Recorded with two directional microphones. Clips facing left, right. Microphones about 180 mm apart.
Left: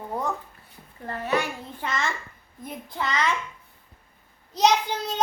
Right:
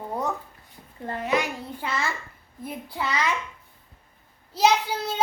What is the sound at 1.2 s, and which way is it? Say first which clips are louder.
A child's voice: right 1 dB; 10° right (ahead or behind).